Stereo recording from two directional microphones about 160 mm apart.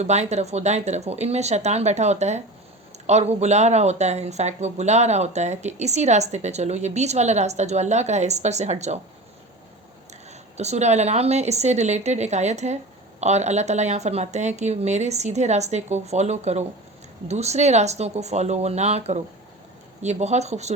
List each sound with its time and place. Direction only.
0.0 s speech: 45° right (ahead or behind)
10.6 s speech: 45° right (ahead or behind)